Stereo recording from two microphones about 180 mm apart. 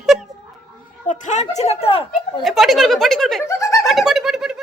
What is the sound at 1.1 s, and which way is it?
Speech, 45° left (ahead or behind).